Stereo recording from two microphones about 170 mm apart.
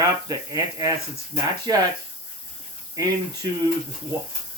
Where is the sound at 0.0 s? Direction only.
20° right (ahead or behind).